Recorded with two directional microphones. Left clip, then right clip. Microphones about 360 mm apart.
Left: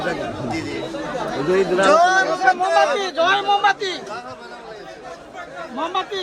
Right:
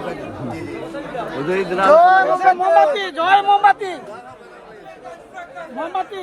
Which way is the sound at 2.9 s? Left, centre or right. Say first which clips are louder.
Right 3 dB; right.